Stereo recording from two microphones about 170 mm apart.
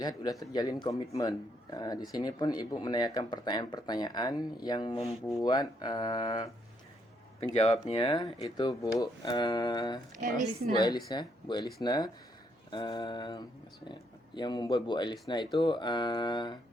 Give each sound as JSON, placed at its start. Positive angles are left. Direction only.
{"t": 0.0, "sound": "a man's voice", "side_deg": 25}
{"t": 7.5, "sound": "a man's voice", "side_deg": 40}
{"t": 10.2, "sound": "a woman's voice", "side_deg": -45}
{"t": 10.7, "sound": "a man's voice", "side_deg": 25}